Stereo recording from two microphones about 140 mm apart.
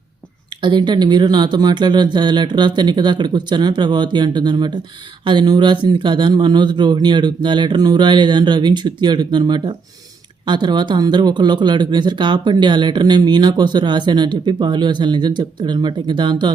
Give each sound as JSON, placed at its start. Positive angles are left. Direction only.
{"t": 0.6, "sound": "speech", "side_deg": -35}